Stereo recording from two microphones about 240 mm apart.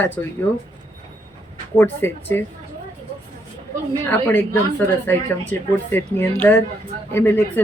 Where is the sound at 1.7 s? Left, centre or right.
Centre.